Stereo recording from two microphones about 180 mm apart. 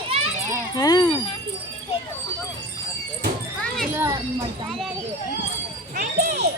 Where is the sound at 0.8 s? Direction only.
20° left (ahead or behind).